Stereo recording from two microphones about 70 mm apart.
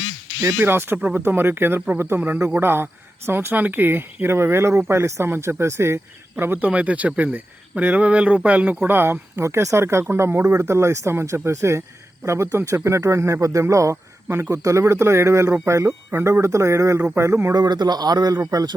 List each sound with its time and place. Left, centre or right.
0.4 s speech: right
6.3 s speech: right
8.9 s speech: right
17.5 s a man's voice: right